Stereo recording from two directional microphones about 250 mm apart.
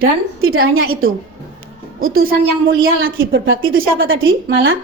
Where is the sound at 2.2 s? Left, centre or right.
Right.